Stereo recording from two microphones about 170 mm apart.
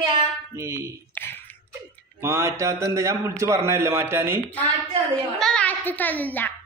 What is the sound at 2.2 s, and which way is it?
A man's voice, 15° right (ahead or behind).